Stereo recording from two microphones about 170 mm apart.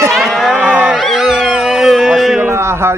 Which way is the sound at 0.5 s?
5° right (ahead or behind).